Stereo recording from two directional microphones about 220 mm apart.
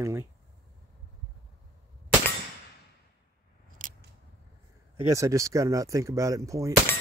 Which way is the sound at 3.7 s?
35° right (ahead or behind).